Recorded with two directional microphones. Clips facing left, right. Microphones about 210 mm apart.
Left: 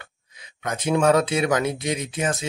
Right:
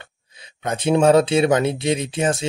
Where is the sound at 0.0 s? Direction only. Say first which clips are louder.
Right 2 dB; 30° right (ahead or behind).